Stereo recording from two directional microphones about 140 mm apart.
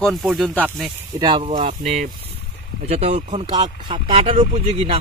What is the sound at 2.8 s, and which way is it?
Speech, 50° right (ahead or behind).